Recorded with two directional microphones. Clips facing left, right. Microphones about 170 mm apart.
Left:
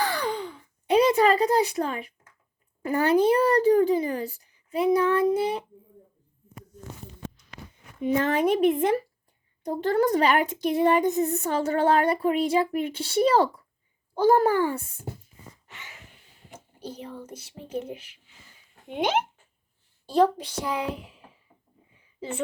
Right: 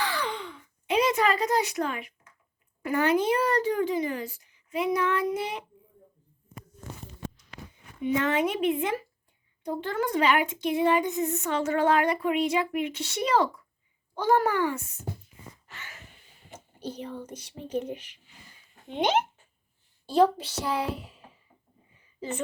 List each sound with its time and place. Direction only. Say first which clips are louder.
0.0 s sigh: left 4 dB; 40° left (ahead or behind)
2.9 s speech: left 4 dB; 35° left (ahead or behind)
8.0 s speech: left 3 dB; 35° left (ahead or behind)
15.6 s a sound: even; 15° left (ahead or behind)
16.5 s speech: right 1 dB; 10° left (ahead or behind)
20.6 s a child's voice: even; 10° right (ahead or behind)
20.8 s speech: left 1 dB; 10° left (ahead or behind)